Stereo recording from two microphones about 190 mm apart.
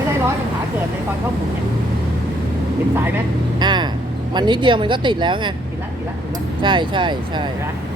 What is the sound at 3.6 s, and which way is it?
Vehicle, 25° right (ahead or behind).